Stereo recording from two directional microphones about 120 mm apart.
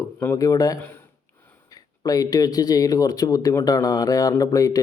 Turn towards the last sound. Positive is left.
turn(degrees=30)  # may be behind; listen again after turning